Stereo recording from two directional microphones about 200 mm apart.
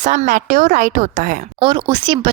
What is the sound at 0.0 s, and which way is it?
A woman's voice, 35° right (ahead or behind).